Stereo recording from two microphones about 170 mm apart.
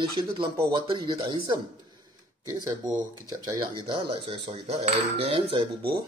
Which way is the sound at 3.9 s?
30° right (ahead or behind).